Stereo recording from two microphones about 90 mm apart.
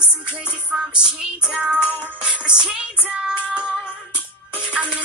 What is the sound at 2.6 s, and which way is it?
Child singing, 10° right (ahead or behind).